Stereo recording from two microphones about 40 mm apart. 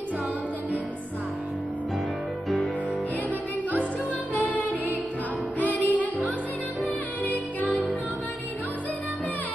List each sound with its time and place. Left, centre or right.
4.4 s music: left